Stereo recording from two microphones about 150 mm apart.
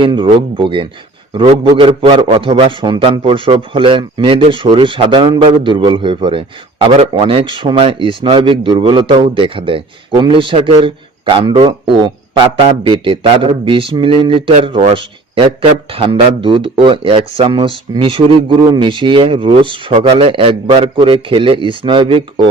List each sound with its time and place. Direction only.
0.0 s speech: 35° right (ahead or behind)
6.8 s a man's voice: 45° right (ahead or behind)
7.1 s speech: 35° right (ahead or behind)